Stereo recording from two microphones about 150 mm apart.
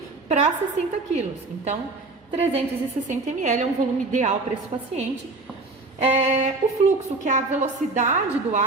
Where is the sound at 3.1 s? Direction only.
55° right (ahead or behind).